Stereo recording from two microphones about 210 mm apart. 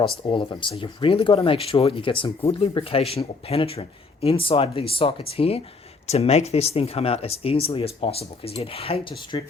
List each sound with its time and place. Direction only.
0.3 s speech: 25° left (ahead or behind)